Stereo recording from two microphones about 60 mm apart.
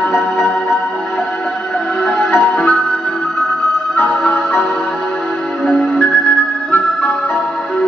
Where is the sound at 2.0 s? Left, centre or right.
Left.